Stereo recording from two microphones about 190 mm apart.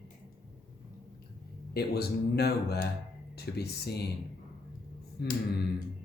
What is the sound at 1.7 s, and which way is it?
Speech, 60° left (ahead or behind).